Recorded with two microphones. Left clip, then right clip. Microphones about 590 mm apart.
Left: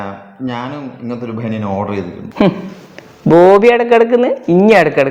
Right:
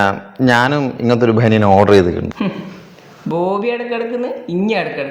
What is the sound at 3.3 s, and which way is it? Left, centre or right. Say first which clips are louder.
Speech: left 11 dB; left.